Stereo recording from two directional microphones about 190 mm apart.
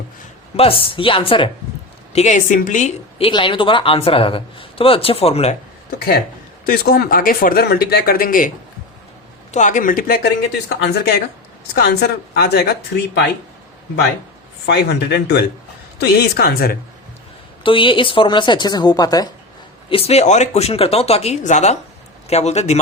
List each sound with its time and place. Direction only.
0.5 s speech: 30° left (ahead or behind)
2.1 s speech: 40° left (ahead or behind)
6.7 s speech: 55° left (ahead or behind)
9.5 s a woman's voice: 40° left (ahead or behind); by 12.7 s 55° left (ahead or behind)
14.7 s a woman's voice: 60° left (ahead or behind)
17.6 s speech: 25° left (ahead or behind)
19.9 s speech: 30° left (ahead or behind)